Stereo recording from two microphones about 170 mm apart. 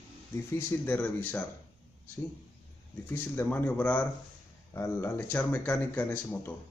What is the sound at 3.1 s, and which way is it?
A man's voice, 10° left (ahead or behind).